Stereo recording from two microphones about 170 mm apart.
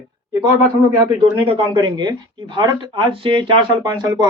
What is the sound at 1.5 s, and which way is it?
Speech, 25° right (ahead or behind).